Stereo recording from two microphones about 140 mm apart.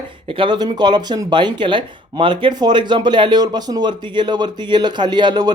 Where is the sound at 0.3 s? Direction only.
40° right (ahead or behind).